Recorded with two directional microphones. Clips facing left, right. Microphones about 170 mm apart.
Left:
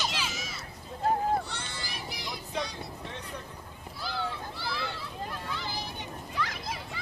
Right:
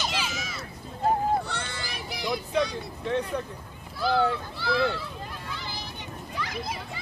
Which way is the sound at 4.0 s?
70° right (ahead or behind).